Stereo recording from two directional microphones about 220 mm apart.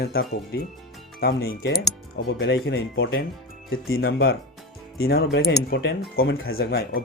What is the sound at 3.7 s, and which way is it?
Speech, 45° left (ahead or behind).